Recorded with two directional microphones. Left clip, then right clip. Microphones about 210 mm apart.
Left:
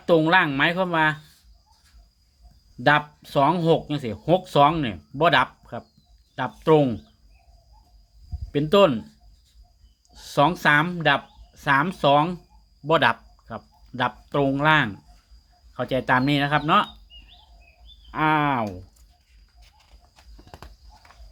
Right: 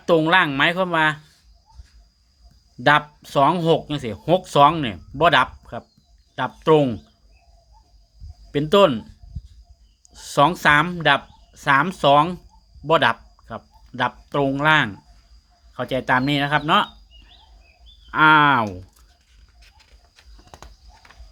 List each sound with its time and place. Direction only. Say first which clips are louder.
0.0 s speech: right 2 dB; 10° right (ahead or behind)
2.8 s speech: right 3 dB; 10° right (ahead or behind)
8.5 s speech: right 2 dB; 10° right (ahead or behind)
10.1 s speech: right 3 dB; 10° right (ahead or behind)
18.1 s speech: right 8 dB; 20° right (ahead or behind)
20.5 s horse: right 1 dB; 20° right (ahead or behind)